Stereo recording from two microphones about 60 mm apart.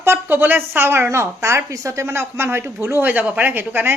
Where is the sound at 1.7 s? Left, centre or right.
Right.